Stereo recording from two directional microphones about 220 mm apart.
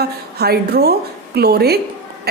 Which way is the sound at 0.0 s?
45° right (ahead or behind).